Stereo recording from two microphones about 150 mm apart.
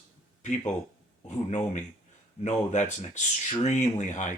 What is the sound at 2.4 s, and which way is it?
Speech, 50° left (ahead or behind).